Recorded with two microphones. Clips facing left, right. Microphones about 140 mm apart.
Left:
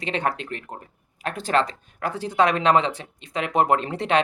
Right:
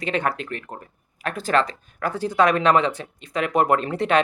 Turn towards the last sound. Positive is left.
turn(degrees=30)  # may be behind; listen again after turning